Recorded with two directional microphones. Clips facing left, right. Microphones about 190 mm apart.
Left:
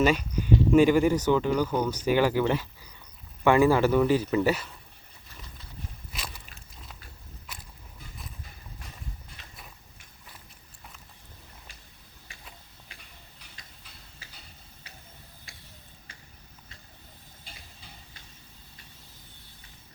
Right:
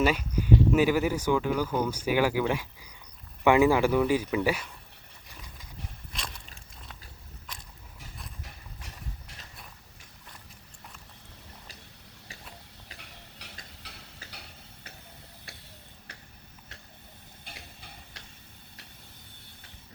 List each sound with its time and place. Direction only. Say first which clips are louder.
0.0 s speech: left 2 dB; 10° right (ahead or behind)
6.1 s a sound: even; 5° left (ahead or behind)
13.0 s a sound: right 4 dB; 75° right (ahead or behind)
13.8 s train: right 5 dB; 85° right
15.5 s tick-tock: right 6 dB; 65° right (ahead or behind)
17.4 s tick-tock: right 3 dB; 60° right (ahead or behind)